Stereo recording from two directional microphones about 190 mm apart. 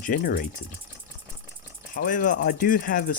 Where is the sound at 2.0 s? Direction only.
45° left (ahead or behind).